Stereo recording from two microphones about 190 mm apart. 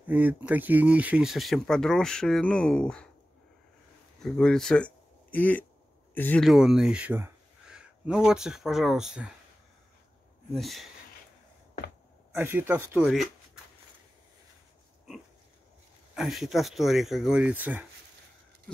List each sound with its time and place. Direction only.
0.1 s speech: 10° right (ahead or behind)
4.2 s speech: 5° left (ahead or behind)
10.5 s speech: centre (ahead or behind)
12.4 s speech: 10° right (ahead or behind)
16.2 s speech: centre (ahead or behind)